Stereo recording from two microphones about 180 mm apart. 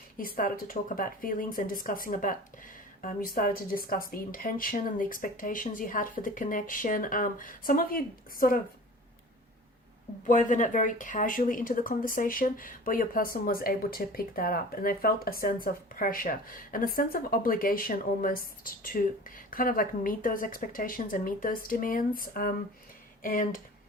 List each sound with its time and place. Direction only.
0.2 s speech: 50° left (ahead or behind)
10.2 s speech: 45° left (ahead or behind)